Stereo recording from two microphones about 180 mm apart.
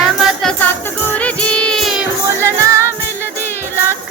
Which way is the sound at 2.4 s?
15° right (ahead or behind).